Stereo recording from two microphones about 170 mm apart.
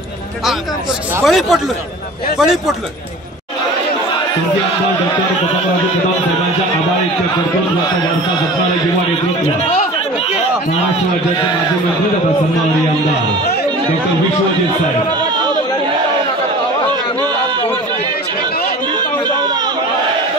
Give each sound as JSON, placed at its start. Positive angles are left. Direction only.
{"t": 1.2, "sound": "speech", "side_deg": 0}